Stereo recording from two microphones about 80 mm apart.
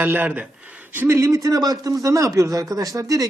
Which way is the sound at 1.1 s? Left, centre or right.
Right.